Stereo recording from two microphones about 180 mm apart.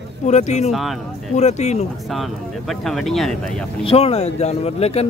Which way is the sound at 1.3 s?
40° left (ahead or behind).